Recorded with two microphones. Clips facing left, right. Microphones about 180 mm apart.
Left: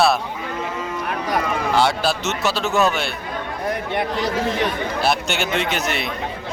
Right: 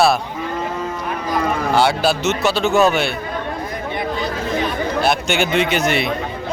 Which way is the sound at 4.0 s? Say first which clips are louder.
Right 1 dB; 80° left.